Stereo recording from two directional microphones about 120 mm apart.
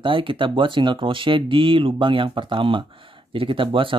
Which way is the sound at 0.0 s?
45° right (ahead or behind).